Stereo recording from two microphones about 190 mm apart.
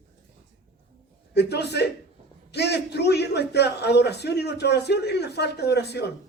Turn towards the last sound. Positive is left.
turn(degrees=60)  # may be behind; listen again after turning